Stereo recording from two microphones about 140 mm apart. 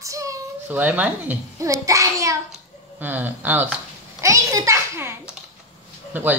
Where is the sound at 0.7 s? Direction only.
10° right (ahead or behind).